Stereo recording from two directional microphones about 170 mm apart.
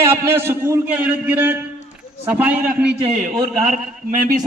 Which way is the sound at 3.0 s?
35° right (ahead or behind).